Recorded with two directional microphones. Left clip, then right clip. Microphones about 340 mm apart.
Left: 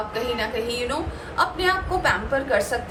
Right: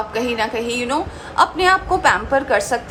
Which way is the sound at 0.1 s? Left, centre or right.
Centre.